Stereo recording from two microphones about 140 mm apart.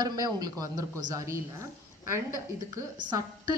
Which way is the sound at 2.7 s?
30° right (ahead or behind).